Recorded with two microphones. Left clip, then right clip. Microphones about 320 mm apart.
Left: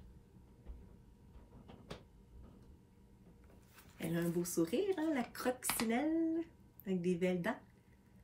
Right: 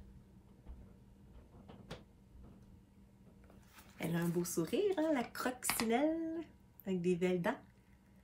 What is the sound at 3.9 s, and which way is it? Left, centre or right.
Speech, centre.